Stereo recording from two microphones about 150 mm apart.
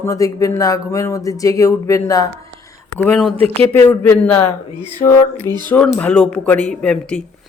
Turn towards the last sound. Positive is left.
turn(degrees=5)  # may be behind; listen again after turning